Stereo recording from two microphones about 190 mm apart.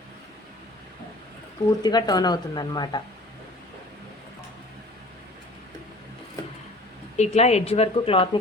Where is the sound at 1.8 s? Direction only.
20° left (ahead or behind).